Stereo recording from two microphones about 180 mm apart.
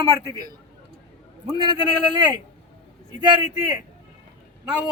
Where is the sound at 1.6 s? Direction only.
25° right (ahead or behind).